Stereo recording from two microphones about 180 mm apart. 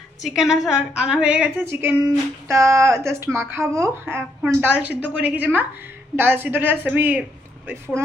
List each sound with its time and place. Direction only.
0.2 s a woman's voice: centre (ahead or behind)